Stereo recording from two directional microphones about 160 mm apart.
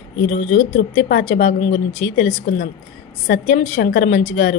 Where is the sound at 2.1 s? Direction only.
75° left (ahead or behind).